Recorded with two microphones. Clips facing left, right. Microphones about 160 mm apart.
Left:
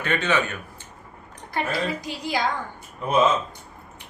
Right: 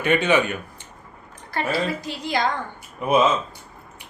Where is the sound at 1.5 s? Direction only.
15° left (ahead or behind).